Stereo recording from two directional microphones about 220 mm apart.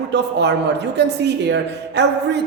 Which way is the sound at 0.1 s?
50° right (ahead or behind).